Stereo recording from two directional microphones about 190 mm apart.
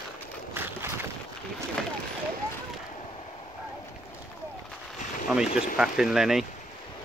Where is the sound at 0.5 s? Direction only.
10° right (ahead or behind).